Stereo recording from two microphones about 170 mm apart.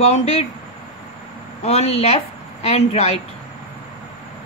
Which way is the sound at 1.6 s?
35° left (ahead or behind).